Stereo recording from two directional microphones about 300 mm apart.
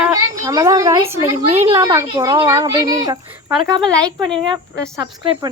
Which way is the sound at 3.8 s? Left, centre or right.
Centre.